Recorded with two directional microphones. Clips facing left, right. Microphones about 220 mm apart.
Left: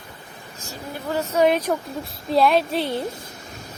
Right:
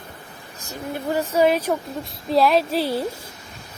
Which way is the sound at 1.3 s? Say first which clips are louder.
Even; 5° right (ahead or behind).